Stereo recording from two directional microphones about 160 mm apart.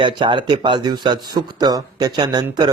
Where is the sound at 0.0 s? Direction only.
30° right (ahead or behind).